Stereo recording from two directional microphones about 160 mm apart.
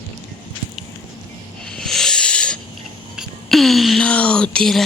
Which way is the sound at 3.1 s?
Centre (ahead or behind).